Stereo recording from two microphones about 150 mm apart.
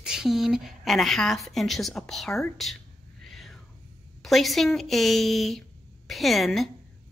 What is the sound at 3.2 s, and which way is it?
Whispering, centre (ahead or behind).